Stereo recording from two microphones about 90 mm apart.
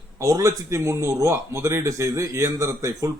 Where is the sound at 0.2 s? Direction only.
40° right (ahead or behind).